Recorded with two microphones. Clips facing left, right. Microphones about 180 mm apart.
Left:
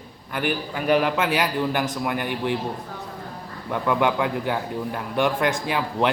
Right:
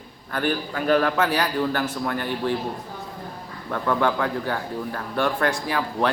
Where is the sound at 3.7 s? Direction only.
10° left (ahead or behind).